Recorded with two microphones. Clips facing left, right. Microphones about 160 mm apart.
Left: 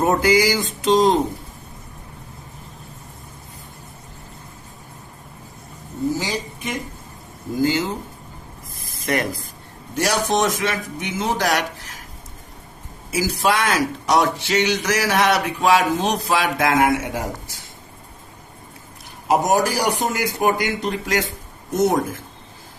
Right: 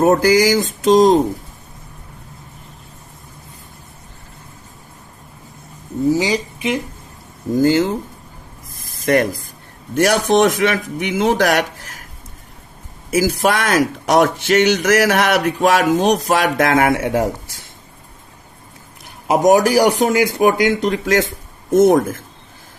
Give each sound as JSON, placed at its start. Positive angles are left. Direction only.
{"t": 0.0, "sound": "speech", "side_deg": -45}
{"t": 6.1, "sound": "speech", "side_deg": -75}
{"t": 7.6, "sound": "speech", "side_deg": -50}
{"t": 9.0, "sound": "speech", "side_deg": -40}
{"t": 9.9, "sound": "speech", "side_deg": -55}
{"t": 13.1, "sound": "speech", "side_deg": -50}
{"t": 16.7, "sound": "speech", "side_deg": -55}
{"t": 19.3, "sound": "speech", "side_deg": -70}
{"t": 21.7, "sound": "speech", "side_deg": -50}